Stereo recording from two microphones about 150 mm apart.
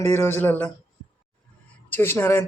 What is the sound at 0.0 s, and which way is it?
Speech, 15° left (ahead or behind).